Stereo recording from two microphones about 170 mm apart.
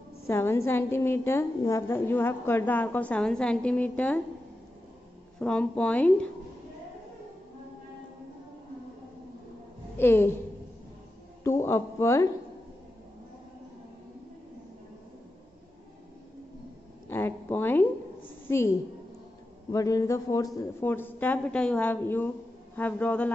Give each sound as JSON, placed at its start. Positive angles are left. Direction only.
{"t": 0.3, "sound": "a woman's voice", "side_deg": 15}
{"t": 5.4, "sound": "a woman's voice", "side_deg": 5}
{"t": 9.9, "sound": "a woman's voice", "side_deg": 15}
{"t": 11.4, "sound": "a woman's voice", "side_deg": 15}
{"t": 17.1, "sound": "a woman's voice", "side_deg": 10}
{"t": 19.7, "sound": "a woman's voice", "side_deg": 20}